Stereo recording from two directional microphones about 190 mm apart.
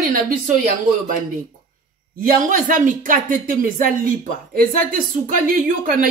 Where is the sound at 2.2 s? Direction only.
45° right (ahead or behind).